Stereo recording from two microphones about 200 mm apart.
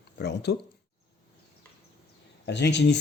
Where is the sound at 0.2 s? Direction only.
55° left (ahead or behind).